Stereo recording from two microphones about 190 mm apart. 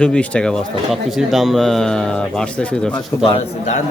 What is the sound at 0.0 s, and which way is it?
Speech, 5° left (ahead or behind).